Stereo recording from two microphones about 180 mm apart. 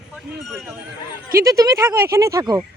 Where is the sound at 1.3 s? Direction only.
20° right (ahead or behind).